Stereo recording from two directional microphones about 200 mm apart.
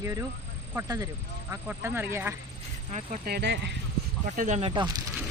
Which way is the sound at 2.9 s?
35° right (ahead or behind).